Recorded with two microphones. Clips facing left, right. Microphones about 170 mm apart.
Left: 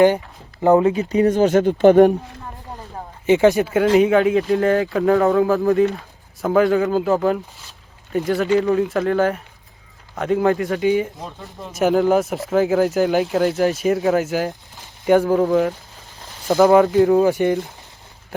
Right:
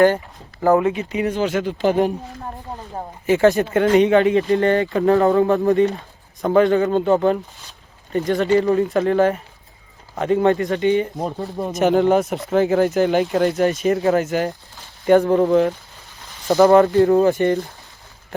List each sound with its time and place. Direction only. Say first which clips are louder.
0.6 s speech: left 2 dB; 25° left (ahead or behind); by 2.1 s 55° left (ahead or behind)
3.2 s speech: left 1 dB; 15° left (ahead or behind)
11.2 s speech: right 9 dB; 40° right (ahead or behind)
11.7 s speech: even; centre (ahead or behind)